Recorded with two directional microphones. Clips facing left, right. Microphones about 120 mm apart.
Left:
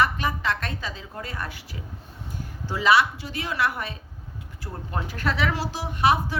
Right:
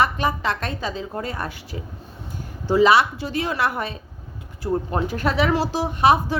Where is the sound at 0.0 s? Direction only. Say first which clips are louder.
Right 3 dB; 25° right (ahead or behind).